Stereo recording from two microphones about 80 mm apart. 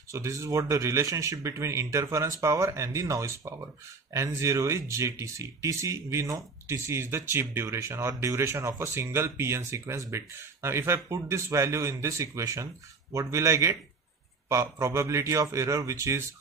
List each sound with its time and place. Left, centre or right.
0.1 s speech: right